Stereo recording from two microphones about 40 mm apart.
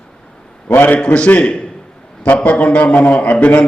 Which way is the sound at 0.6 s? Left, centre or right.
Left.